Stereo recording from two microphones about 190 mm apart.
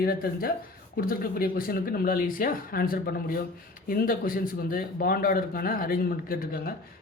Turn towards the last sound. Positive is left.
turn(degrees=50)  # may be behind; listen again after turning